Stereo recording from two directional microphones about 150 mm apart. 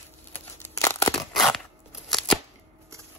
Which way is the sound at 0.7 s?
20° left (ahead or behind).